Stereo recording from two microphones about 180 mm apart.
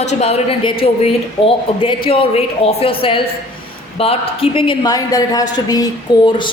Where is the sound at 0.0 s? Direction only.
40° left (ahead or behind).